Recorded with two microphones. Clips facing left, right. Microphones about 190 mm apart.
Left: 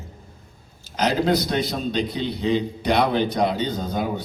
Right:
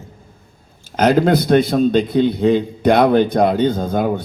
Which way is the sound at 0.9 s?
55° right (ahead or behind).